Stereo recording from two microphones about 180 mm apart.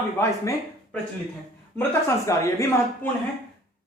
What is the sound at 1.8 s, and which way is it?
Speech, 15° left (ahead or behind).